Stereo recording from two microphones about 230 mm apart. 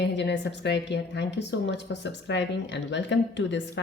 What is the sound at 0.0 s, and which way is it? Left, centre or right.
A woman's voice, left.